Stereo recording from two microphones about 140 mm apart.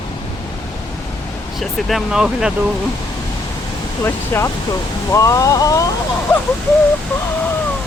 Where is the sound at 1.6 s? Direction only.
Centre (ahead or behind).